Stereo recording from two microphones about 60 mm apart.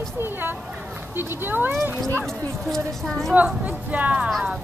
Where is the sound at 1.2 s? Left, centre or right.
Right.